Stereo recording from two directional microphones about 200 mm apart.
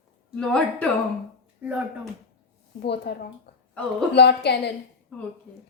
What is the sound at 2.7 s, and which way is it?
Speech, 55° left (ahead or behind).